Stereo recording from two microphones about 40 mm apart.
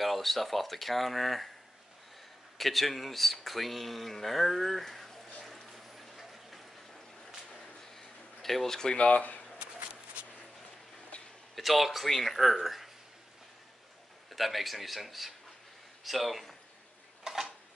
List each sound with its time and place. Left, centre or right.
0.0 s speech: centre
2.5 s speech: centre
5.4 s a sound: centre
8.9 s speech: left
11.5 s speech: centre
14.3 s speech: centre
17.3 s a sound: centre